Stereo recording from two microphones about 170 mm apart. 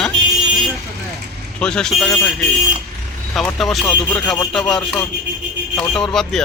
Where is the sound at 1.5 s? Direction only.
5° left (ahead or behind).